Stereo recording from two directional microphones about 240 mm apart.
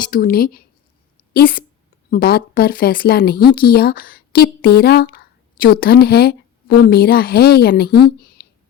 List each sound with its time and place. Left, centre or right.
0.0 s speech: left